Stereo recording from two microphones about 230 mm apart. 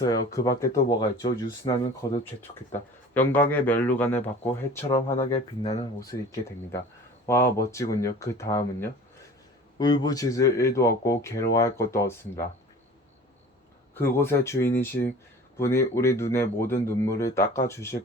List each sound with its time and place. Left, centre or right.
0.0 s speech: centre
3.2 s speech: centre
7.3 s speech: centre
13.9 s speech: centre